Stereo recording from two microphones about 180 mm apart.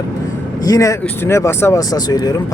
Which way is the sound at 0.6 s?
20° left (ahead or behind).